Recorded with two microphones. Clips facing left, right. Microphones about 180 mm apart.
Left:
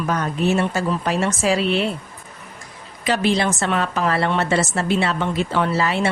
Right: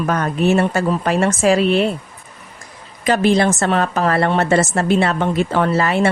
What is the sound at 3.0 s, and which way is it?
A woman's voice, 50° right (ahead or behind).